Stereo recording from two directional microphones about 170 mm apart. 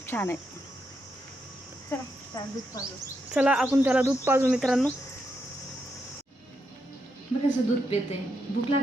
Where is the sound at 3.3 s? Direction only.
5° right (ahead or behind).